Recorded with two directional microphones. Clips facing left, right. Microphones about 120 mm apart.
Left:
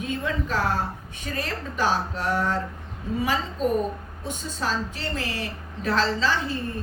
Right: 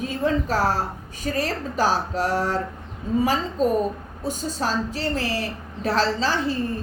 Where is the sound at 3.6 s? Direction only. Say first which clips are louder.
Right 3 dB; 40° right (ahead or behind).